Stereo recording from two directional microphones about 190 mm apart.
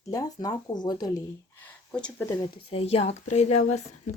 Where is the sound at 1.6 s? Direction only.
10° left (ahead or behind).